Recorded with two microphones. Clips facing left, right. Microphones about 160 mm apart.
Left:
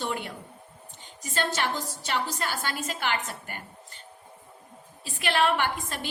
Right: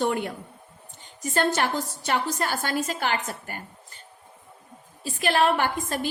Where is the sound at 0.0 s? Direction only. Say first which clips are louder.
Right 7 dB; 50° right (ahead or behind).